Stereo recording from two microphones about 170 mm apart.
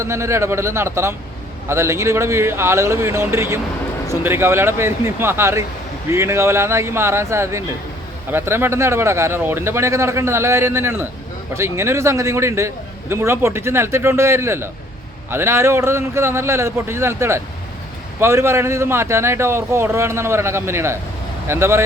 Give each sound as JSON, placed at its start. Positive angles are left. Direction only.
{"t": 0.0, "sound": "a man's voice", "side_deg": -15}